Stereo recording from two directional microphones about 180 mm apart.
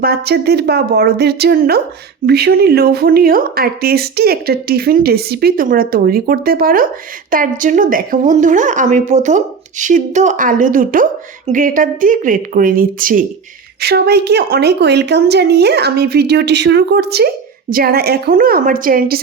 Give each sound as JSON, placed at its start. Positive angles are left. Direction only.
{"t": 0.0, "sound": "a woman's voice", "side_deg": -60}
{"t": 13.8, "sound": "a woman's voice", "side_deg": -65}